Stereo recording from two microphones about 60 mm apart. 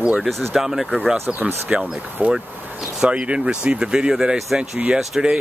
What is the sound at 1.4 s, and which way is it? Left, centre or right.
Speech, right.